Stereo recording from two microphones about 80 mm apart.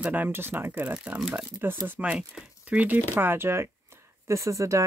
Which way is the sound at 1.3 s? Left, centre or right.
Right.